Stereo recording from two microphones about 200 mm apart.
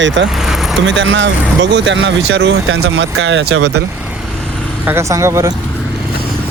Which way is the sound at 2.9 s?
60° right (ahead or behind).